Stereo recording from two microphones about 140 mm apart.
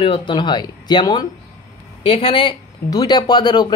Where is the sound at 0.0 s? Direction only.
40° left (ahead or behind).